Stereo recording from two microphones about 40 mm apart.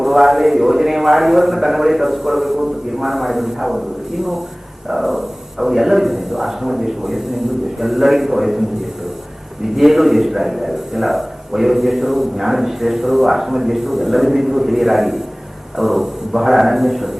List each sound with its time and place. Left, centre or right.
0.0 s a man's voice: centre
9.7 s a man's voice: centre